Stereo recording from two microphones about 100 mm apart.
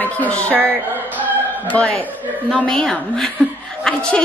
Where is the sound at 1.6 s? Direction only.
15° left (ahead or behind).